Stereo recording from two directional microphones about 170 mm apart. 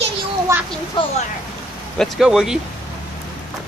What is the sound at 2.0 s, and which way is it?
Speech, centre (ahead or behind).